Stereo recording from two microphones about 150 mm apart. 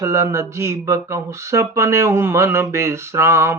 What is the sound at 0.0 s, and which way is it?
Speech, 20° right (ahead or behind).